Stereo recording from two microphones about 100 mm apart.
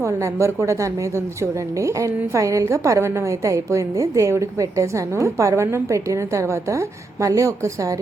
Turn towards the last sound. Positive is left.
turn(degrees=-35)  # may be behind; listen again after turning